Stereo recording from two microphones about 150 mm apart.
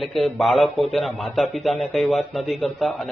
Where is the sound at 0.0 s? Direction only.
Centre (ahead or behind).